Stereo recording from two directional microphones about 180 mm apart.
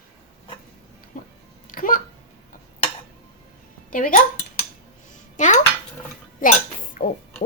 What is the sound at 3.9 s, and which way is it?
Speech, 50° left (ahead or behind).